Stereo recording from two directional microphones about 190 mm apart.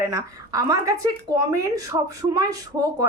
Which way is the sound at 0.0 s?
15° right (ahead or behind).